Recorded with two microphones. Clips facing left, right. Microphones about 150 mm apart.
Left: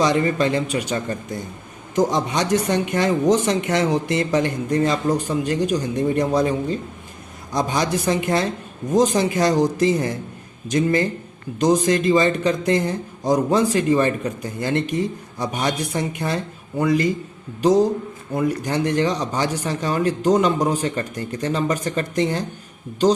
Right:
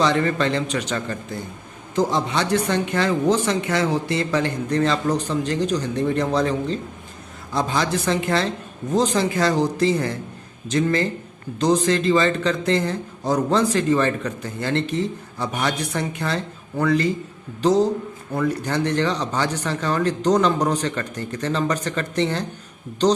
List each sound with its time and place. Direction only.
0.0 s speech: 15° left (ahead or behind)
2.0 s speech: 20° left (ahead or behind)